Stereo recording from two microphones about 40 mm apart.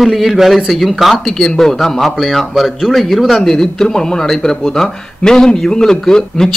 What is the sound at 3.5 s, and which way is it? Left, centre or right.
A man's voice, centre.